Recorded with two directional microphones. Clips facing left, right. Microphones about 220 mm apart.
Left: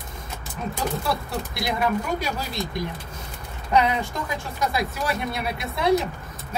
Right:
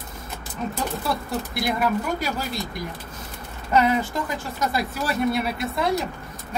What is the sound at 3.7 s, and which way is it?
Speech, centre (ahead or behind).